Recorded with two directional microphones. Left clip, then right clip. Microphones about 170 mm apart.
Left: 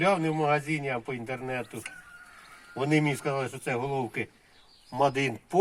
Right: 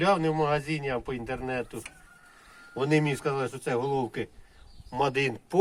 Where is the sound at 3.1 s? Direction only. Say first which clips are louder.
Right 1 dB; 25° left (ahead or behind).